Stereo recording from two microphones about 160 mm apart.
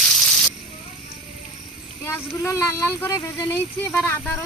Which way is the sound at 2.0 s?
15° left (ahead or behind).